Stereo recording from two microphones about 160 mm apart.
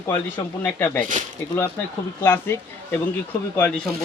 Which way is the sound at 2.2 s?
15° left (ahead or behind).